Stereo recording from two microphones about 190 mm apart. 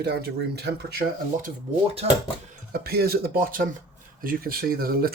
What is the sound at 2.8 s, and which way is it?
Speech, 55° right (ahead or behind).